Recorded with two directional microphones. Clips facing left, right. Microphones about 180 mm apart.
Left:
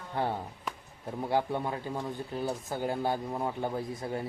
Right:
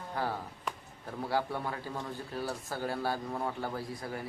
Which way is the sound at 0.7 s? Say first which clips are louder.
Right 1 dB; centre (ahead or behind).